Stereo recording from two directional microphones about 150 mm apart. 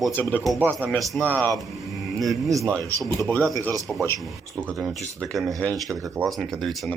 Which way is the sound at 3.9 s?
5° left (ahead or behind).